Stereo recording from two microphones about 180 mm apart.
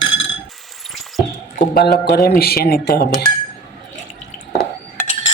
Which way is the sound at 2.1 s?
60° left (ahead or behind).